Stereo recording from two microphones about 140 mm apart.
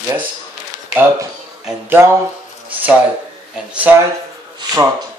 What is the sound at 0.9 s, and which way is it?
Speech, 15° right (ahead or behind).